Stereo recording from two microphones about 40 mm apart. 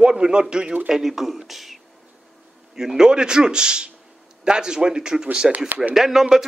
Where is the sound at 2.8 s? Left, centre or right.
Centre.